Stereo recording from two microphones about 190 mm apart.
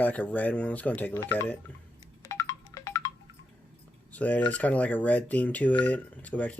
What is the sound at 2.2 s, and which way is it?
Music, 15° left (ahead or behind).